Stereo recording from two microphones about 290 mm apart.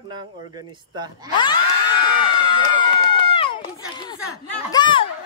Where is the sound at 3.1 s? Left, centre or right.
Centre.